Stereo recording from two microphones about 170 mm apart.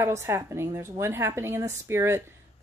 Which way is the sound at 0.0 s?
15° right (ahead or behind).